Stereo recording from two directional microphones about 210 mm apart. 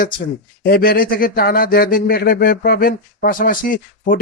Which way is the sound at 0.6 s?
45° left (ahead or behind).